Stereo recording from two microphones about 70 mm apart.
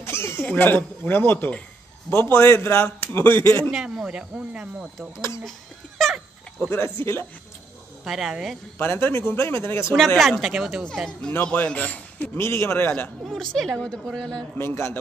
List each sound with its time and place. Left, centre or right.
0.0 s a sound: left
0.5 s speech: left
3.7 s speech: centre
6.7 s speech: left
8.0 s speech: centre
8.7 s speech: left
9.9 s speech: centre
10.4 s speech: centre
11.5 s a man's voice: left
12.4 s speech: left
13.2 s a woman's voice: centre
14.6 s speech: left